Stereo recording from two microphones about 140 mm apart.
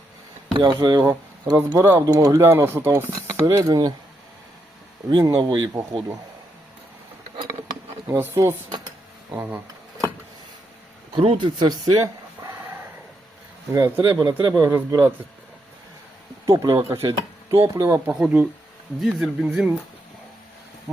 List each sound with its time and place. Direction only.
0.5 s speech: 35° right (ahead or behind)
5.0 s speech: 30° right (ahead or behind)
8.0 s speech: 15° right (ahead or behind)
11.1 s speech: 35° right (ahead or behind)
13.7 s speech: 15° right (ahead or behind)
14.0 s speech: 25° right (ahead or behind)
14.6 s speech: 15° right (ahead or behind)
16.5 s speech: 20° right (ahead or behind); by 19.5 s centre (ahead or behind)